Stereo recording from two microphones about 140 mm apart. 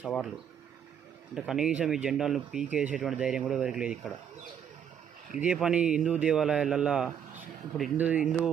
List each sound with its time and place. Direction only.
1.4 s speech: 5° right (ahead or behind)
5.3 s speech: 5° right (ahead or behind)